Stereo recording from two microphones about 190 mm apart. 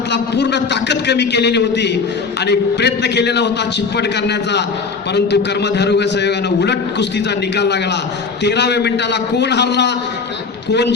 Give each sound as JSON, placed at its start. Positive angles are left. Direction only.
{"t": 0.1, "sound": "a man's voice", "side_deg": 65}